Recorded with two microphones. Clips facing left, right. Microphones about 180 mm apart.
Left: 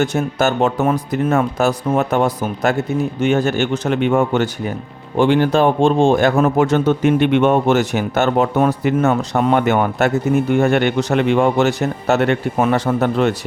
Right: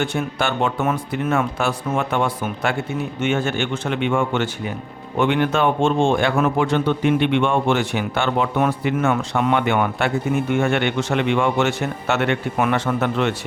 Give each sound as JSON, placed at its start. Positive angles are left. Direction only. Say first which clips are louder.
{"t": 0.0, "sound": "a man's voice", "louder": "left 5 dB", "side_deg": 40}